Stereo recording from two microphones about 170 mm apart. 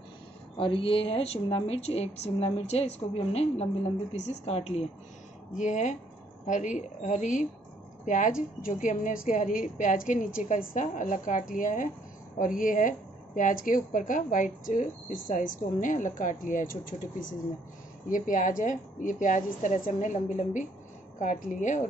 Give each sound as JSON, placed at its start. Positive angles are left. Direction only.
{"t": 0.6, "sound": "a woman's voice", "side_deg": 30}
{"t": 4.3, "sound": "a woman's voice", "side_deg": 40}